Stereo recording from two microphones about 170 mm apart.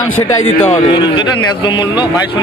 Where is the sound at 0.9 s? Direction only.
25° left (ahead or behind).